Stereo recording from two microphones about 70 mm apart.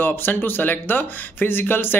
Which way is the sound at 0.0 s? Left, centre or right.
Left.